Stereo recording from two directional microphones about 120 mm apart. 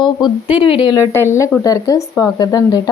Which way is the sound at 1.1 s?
20° left (ahead or behind).